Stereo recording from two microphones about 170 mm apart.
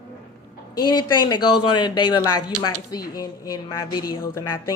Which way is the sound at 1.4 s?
25° left (ahead or behind).